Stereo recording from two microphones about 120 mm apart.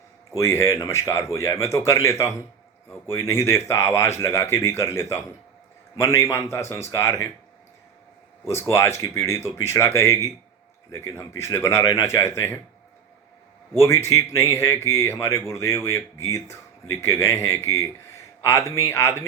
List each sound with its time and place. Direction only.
0.3 s speech: 25° left (ahead or behind)
8.4 s speech: 20° left (ahead or behind)
13.7 s speech: 25° left (ahead or behind)